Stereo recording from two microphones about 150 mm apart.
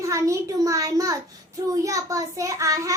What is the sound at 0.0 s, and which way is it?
A child's voice, 20° right (ahead or behind).